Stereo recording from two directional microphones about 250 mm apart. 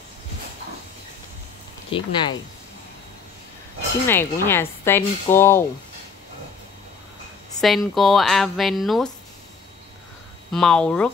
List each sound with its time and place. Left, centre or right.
1.9 s speech: left
4.1 s speech: centre
7.6 s speech: centre
10.5 s speech: centre